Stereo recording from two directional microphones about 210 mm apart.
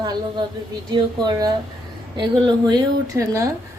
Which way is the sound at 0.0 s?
20° right (ahead or behind).